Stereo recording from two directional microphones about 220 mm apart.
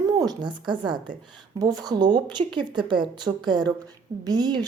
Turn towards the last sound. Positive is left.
turn(degrees=-20)  # may be behind; listen again after turning